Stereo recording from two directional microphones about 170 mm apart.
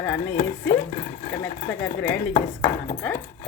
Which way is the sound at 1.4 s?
15° left (ahead or behind).